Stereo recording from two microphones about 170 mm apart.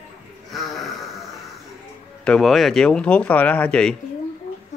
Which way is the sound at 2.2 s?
5° left (ahead or behind).